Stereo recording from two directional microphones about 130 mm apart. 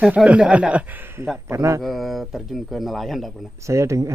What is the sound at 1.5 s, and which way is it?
Speech, 20° right (ahead or behind).